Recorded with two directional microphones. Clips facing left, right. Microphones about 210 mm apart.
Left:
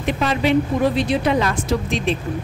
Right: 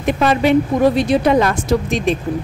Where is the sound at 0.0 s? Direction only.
50° right (ahead or behind).